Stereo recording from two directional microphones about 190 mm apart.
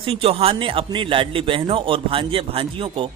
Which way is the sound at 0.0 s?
30° right (ahead or behind).